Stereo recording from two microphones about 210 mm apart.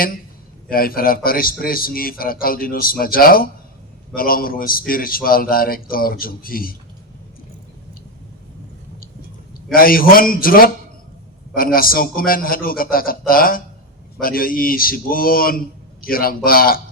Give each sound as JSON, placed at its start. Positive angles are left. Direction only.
{"t": 0.7, "sound": "a man's voice", "side_deg": 45}
{"t": 9.7, "sound": "a man's voice", "side_deg": 45}